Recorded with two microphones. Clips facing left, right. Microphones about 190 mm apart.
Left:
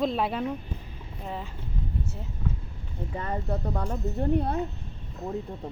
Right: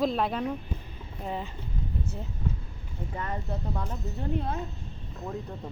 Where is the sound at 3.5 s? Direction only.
50° left (ahead or behind).